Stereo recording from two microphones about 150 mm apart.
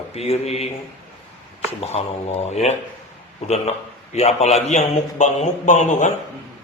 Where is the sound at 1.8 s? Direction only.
45° left (ahead or behind).